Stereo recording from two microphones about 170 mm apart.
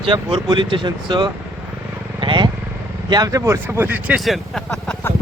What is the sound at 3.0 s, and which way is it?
Speech, 25° right (ahead or behind).